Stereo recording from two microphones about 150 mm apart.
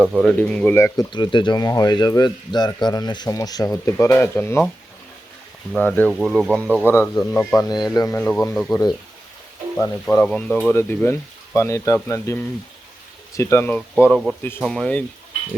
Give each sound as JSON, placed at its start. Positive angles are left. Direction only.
{"t": 0.0, "sound": "speech", "side_deg": -5}
{"t": 0.3, "sound": "speech", "side_deg": 5}
{"t": 0.9, "sound": "speech", "side_deg": 30}
{"t": 5.7, "sound": "speech", "side_deg": 10}
{"t": 6.1, "sound": "speech", "side_deg": 0}
{"t": 6.7, "sound": "speech", "side_deg": -10}
{"t": 7.2, "sound": "speech", "side_deg": 5}
{"t": 7.6, "sound": "speech", "side_deg": 25}
{"t": 8.2, "sound": "speech", "side_deg": 5}
{"t": 8.7, "sound": "speech", "side_deg": 25}
{"t": 14.1, "sound": "speech", "side_deg": 0}